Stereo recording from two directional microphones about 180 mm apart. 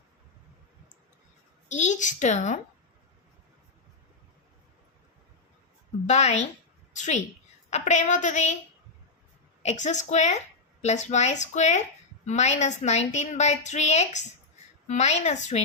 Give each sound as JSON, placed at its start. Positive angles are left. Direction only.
{"t": 1.7, "sound": "a woman's voice", "side_deg": 40}
{"t": 6.1, "sound": "a woman's voice", "side_deg": 40}
{"t": 6.9, "sound": "a sound", "side_deg": 40}
{"t": 7.7, "sound": "a woman's voice", "side_deg": 40}
{"t": 9.6, "sound": "a woman's voice", "side_deg": 40}